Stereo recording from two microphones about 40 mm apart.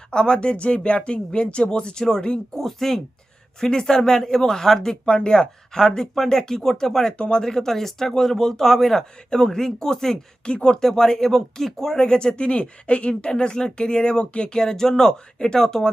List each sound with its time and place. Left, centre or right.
0.1 s speech: left
2.6 s speech: centre
5.0 s speech: left